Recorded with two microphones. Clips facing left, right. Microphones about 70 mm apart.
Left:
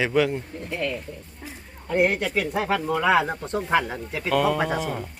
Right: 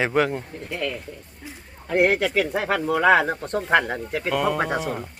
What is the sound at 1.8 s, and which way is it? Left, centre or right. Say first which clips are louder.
Speech: right 2 dB; right.